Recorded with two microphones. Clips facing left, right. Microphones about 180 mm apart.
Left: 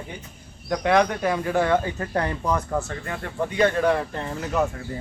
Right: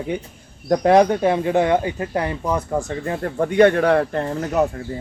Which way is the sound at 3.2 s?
50° right (ahead or behind).